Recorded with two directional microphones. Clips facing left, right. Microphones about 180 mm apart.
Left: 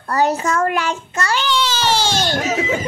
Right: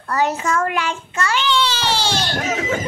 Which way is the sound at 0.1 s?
35° left (ahead or behind).